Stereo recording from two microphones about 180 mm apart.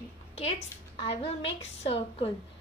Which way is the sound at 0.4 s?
35° left (ahead or behind).